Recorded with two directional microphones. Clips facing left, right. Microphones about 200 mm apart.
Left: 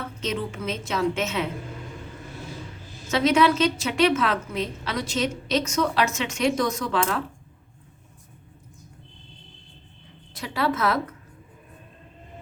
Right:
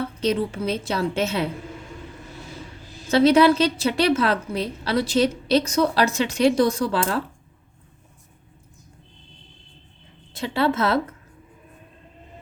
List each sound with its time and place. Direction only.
0.2 s a woman's voice: 35° right (ahead or behind)
3.1 s a woman's voice: 35° right (ahead or behind)
10.3 s a woman's voice: 25° right (ahead or behind)